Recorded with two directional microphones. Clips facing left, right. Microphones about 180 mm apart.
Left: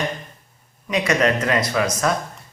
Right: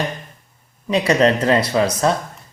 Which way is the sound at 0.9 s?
30° right (ahead or behind).